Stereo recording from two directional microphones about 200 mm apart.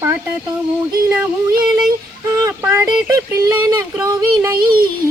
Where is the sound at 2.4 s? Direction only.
15° right (ahead or behind).